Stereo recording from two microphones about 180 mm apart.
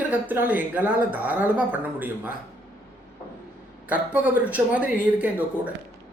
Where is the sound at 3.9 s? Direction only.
10° right (ahead or behind).